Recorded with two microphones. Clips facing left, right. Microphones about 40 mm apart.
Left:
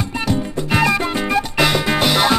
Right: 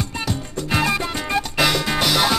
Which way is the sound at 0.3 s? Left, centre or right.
Left.